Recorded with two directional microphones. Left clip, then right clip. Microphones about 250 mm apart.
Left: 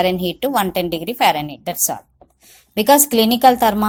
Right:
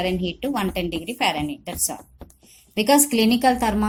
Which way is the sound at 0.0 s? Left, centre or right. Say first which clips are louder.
Left 7 dB; left.